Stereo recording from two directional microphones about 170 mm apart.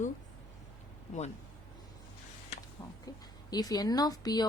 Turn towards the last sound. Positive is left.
turn(degrees=25)  # may be behind; listen again after turning